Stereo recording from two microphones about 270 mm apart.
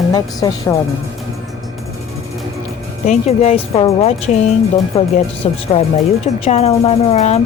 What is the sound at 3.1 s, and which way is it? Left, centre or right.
Speech, left.